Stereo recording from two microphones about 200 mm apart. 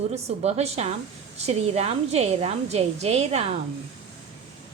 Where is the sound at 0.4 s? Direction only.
30° right (ahead or behind).